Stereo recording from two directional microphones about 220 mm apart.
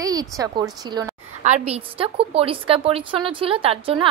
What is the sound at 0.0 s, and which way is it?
A woman's voice, 15° right (ahead or behind).